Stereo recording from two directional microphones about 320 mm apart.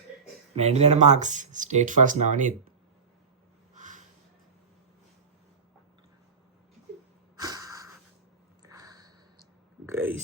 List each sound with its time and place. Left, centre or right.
0.5 s speech: centre
3.8 s snort: right
7.3 s a sound: centre